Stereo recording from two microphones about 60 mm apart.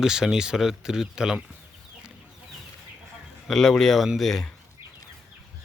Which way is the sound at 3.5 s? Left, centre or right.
Centre.